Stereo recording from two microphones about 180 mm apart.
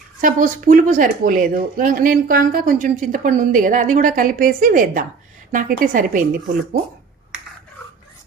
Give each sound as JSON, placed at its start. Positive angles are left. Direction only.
{"t": 0.2, "sound": "speech", "side_deg": -50}